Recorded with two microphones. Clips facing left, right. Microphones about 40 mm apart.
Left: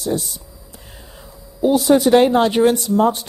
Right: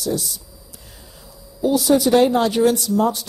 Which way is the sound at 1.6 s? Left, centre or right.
Left.